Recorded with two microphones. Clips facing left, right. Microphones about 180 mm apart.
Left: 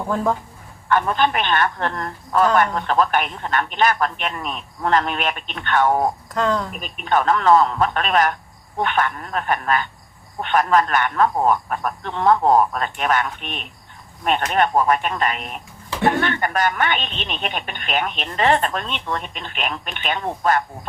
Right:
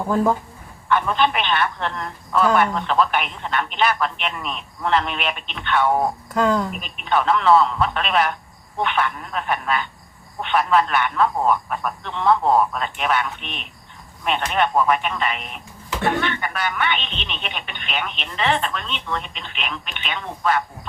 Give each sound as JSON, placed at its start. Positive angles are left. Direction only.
{"t": 0.9, "sound": "speech", "side_deg": 45}
{"t": 6.3, "sound": "speech", "side_deg": -10}
{"t": 6.8, "sound": "speech", "side_deg": 45}